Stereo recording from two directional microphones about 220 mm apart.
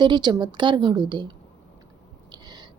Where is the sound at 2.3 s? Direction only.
20° right (ahead or behind).